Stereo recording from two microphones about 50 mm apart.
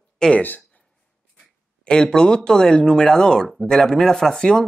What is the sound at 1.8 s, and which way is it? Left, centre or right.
Speech, centre.